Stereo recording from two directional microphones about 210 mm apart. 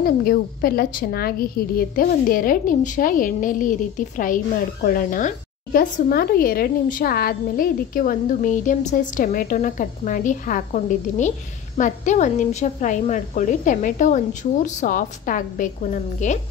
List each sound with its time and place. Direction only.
0.0 s a woman's voice: 45° left (ahead or behind)
4.8 s a woman's voice: 40° left (ahead or behind)